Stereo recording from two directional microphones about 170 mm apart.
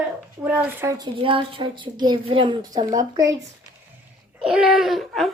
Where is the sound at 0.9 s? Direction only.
25° right (ahead or behind).